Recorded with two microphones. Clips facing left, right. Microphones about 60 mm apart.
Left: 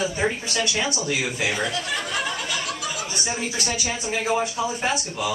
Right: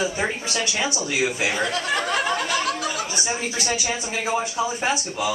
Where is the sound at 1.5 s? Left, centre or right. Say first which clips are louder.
Right 3 dB; right.